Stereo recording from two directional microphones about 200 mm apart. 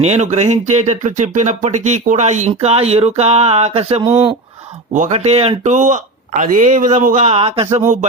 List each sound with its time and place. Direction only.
0.0 s speech: 30° right (ahead or behind)